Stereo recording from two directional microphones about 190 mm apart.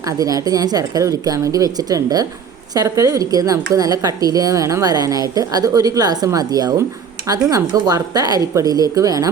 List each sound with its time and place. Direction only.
0.0 s speech: 20° right (ahead or behind)